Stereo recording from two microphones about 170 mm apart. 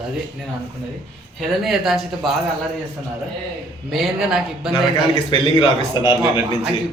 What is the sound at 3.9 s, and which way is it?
Speech, centre (ahead or behind).